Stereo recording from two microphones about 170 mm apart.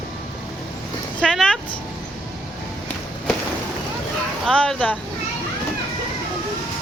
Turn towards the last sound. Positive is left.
turn(degrees=5)  # may be behind; listen again after turning